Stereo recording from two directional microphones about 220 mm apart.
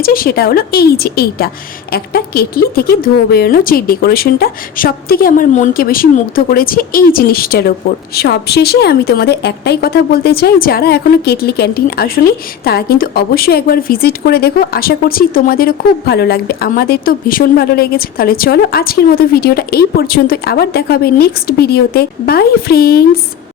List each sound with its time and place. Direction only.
0.0 s a woman's voice: 40° left (ahead or behind)